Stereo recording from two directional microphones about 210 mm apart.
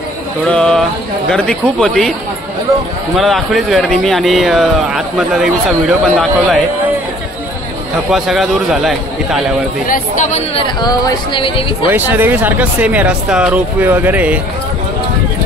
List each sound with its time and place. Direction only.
0.5 s speech: 5° left (ahead or behind)
3.2 s speech: centre (ahead or behind)
8.1 s speech: centre (ahead or behind)
9.8 s speech: 40° left (ahead or behind)
10.8 s speech: 20° left (ahead or behind)
11.9 s speech: 10° right (ahead or behind)